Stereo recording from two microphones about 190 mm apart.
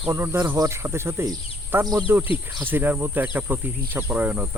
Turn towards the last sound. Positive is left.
turn(degrees=-10)  # may be behind; listen again after turning